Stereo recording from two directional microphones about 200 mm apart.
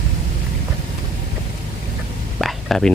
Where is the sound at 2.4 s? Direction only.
Centre (ahead or behind).